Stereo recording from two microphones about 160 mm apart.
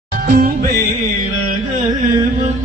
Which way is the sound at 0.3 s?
60° right (ahead or behind).